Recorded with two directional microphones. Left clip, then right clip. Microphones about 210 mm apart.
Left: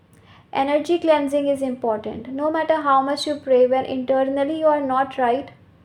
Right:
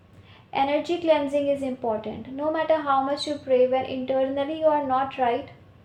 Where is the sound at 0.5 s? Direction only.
45° left (ahead or behind).